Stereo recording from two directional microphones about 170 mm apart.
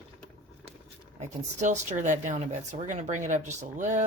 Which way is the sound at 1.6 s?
45° right (ahead or behind).